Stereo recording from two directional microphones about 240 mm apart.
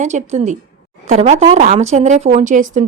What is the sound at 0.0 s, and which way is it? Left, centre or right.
A woman's voice, right.